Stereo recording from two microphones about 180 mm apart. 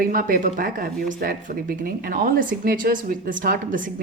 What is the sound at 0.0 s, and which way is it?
Speech, 50° right (ahead or behind).